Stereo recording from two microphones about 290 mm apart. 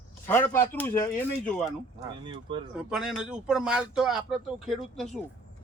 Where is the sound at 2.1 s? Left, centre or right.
Centre.